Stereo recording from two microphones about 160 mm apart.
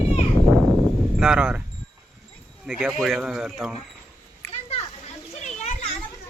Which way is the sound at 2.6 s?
5° right (ahead or behind).